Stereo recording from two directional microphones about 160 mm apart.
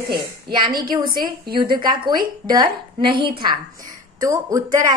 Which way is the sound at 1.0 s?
65° right (ahead or behind).